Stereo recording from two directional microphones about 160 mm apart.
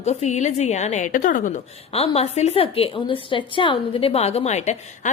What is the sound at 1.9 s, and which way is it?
A woman's voice, 40° left (ahead or behind).